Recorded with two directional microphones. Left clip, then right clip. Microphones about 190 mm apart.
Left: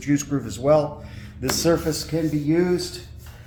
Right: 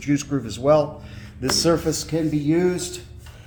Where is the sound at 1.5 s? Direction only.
40° right (ahead or behind).